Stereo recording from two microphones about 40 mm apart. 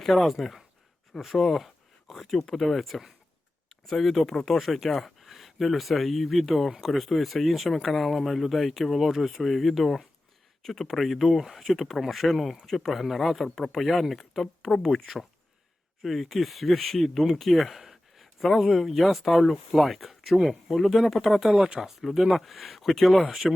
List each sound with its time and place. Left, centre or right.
0.0 s speech: centre
16.0 s speech: centre
21.5 s speech: right
21.8 s speech: centre